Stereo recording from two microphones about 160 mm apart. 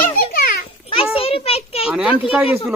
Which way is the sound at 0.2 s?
65° left (ahead or behind).